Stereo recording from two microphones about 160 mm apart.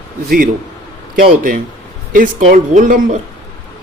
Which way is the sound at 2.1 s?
60° right (ahead or behind).